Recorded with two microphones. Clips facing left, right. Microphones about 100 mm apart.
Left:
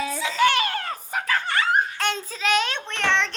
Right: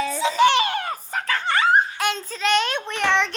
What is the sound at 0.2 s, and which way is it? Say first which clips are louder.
Giggle: right 4 dB; 25° right (ahead or behind).